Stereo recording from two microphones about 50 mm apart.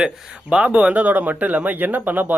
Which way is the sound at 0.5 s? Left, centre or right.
Right.